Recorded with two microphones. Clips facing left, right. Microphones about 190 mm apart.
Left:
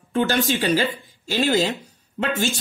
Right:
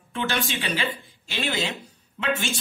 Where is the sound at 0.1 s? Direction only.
40° left (ahead or behind).